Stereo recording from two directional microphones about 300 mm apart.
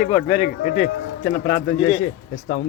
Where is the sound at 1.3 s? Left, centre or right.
Left.